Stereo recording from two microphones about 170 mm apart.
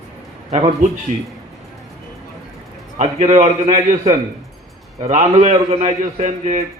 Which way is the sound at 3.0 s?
40° right (ahead or behind).